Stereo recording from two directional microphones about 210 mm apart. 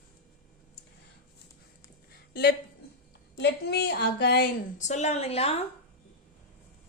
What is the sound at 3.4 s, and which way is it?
A woman's voice, 50° left (ahead or behind).